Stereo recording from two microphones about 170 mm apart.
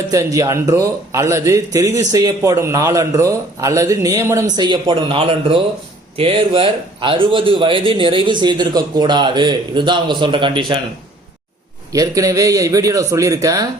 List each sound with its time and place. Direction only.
0.1 s a man's voice: 20° right (ahead or behind)
11.9 s a man's voice: 20° right (ahead or behind)